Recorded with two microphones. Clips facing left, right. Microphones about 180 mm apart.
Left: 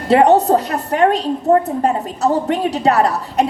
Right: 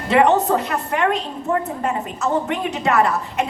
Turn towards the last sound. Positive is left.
turn(degrees=35)  # may be behind; listen again after turning